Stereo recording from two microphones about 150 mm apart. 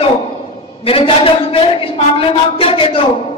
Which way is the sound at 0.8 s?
40° left (ahead or behind).